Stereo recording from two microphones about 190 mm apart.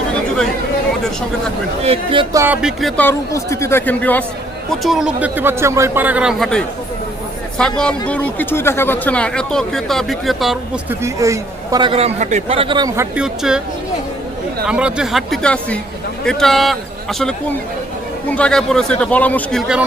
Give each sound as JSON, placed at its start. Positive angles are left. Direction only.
{"t": 1.8, "sound": "a man's voice", "side_deg": -30}
{"t": 2.3, "sound": "a man's voice", "side_deg": -10}
{"t": 3.0, "sound": "a man's voice", "side_deg": 15}
{"t": 11.0, "sound": "a man's voice", "side_deg": -15}
{"t": 13.1, "sound": "speech", "side_deg": -5}
{"t": 14.7, "sound": "speech", "side_deg": -5}